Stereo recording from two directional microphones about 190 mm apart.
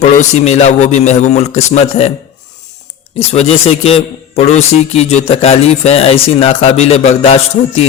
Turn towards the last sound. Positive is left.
turn(degrees=30)  # may be behind; listen again after turning